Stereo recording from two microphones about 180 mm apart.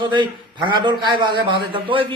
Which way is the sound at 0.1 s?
25° right (ahead or behind).